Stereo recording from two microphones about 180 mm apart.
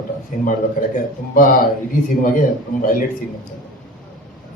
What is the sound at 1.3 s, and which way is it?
Speech, 50° left (ahead or behind).